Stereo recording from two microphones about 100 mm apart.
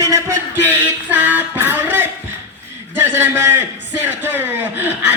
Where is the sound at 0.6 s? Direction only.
15° right (ahead or behind).